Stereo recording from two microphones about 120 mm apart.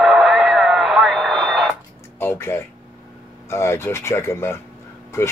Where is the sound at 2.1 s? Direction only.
20° left (ahead or behind).